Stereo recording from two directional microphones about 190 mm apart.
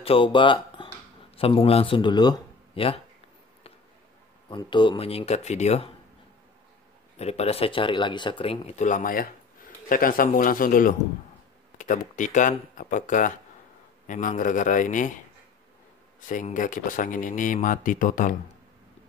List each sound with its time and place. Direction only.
0.0 s a man's voice: 30° left (ahead or behind)
4.5 s speech: 25° left (ahead or behind)
7.2 s speech: 35° left (ahead or behind)
16.3 s speech: 40° left (ahead or behind)